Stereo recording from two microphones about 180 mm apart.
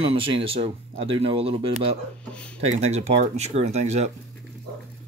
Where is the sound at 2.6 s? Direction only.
35° right (ahead or behind).